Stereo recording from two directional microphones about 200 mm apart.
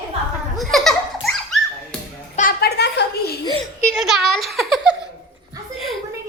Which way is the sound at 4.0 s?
Centre (ahead or behind).